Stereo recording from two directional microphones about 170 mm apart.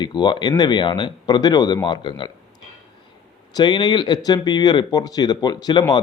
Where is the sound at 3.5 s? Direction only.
25° left (ahead or behind).